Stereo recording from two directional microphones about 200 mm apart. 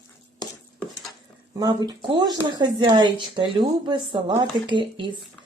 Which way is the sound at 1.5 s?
20° right (ahead or behind).